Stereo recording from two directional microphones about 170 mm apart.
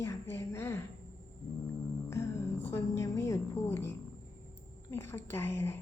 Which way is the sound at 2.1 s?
15° left (ahead or behind).